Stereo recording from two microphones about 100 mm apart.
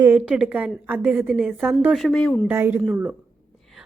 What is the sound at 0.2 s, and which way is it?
A woman's voice, 10° right (ahead or behind).